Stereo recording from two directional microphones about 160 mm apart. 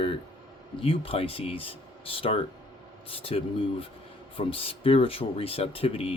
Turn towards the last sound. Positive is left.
turn(degrees=35)  # may be behind; listen again after turning